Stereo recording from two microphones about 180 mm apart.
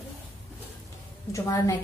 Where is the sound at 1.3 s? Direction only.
15° left (ahead or behind).